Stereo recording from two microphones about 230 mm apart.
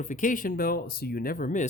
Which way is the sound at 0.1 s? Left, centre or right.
Left.